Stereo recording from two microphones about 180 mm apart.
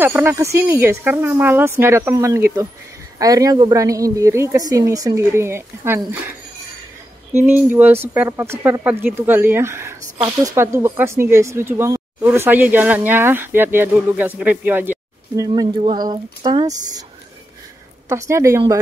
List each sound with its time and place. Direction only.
0.0 s speech: 10° right (ahead or behind)
7.3 s speech: 10° right (ahead or behind)
18.0 s speech: 15° right (ahead or behind)